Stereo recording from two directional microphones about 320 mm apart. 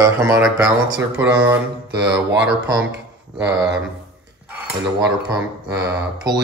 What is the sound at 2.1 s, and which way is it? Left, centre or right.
Speech, right.